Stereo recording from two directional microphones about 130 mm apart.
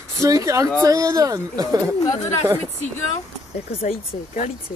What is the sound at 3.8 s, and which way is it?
Speech, 55° left (ahead or behind).